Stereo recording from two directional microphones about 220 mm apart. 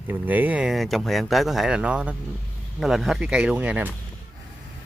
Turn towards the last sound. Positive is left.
turn(degrees=-5)  # may be behind; listen again after turning